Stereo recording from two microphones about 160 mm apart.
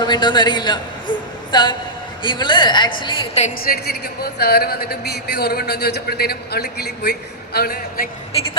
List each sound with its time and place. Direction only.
0.0 s a woman's voice: 30° left (ahead or behind)
3.7 s speech: 85° left; by 8.1 s 70° left (ahead or behind)